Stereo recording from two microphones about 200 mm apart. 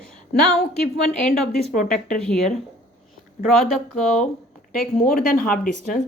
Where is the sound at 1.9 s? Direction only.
5° left (ahead or behind).